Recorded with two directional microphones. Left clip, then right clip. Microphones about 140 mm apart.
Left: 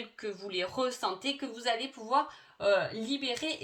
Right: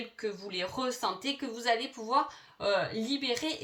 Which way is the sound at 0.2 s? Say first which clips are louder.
Even; 40° left (ahead or behind).